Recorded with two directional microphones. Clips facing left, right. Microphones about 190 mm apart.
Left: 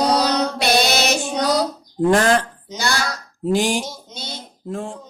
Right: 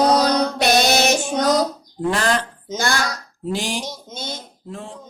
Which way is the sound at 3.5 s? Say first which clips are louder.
Left 5 dB; 45° left (ahead or behind).